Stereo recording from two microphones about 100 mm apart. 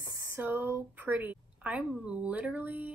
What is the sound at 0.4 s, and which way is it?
A woman's voice, 20° right (ahead or behind).